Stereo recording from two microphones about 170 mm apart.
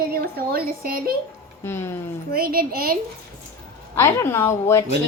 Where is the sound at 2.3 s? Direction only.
60° right (ahead or behind).